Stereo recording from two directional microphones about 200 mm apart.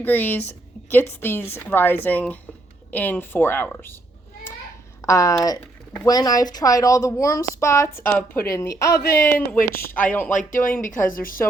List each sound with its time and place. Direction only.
0.0 s a woman's voice: 10° left (ahead or behind)
5.0 s a woman's voice: 15° left (ahead or behind)
10.3 s speech: 40° left (ahead or behind)